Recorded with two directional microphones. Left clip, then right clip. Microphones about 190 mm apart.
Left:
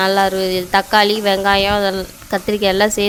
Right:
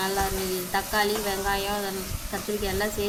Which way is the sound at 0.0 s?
50° left (ahead or behind).